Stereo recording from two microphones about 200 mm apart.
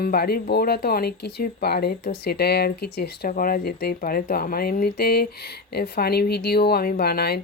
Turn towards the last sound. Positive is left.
turn(degrees=50)  # may be behind; listen again after turning